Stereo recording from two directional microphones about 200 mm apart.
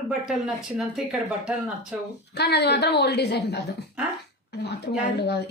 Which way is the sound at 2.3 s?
55° left (ahead or behind).